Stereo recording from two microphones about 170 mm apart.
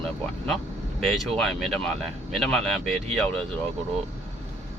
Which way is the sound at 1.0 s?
Centre (ahead or behind).